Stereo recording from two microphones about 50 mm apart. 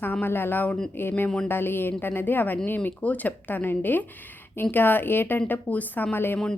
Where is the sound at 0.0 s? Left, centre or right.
Left.